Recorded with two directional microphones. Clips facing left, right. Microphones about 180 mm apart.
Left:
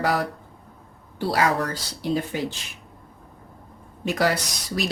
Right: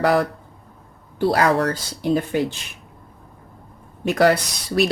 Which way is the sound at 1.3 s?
50° right (ahead or behind).